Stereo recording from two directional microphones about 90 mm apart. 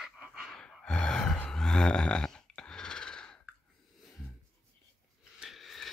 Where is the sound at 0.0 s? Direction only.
5° right (ahead or behind).